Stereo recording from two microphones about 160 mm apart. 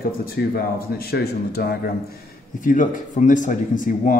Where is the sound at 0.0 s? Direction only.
70° left (ahead or behind).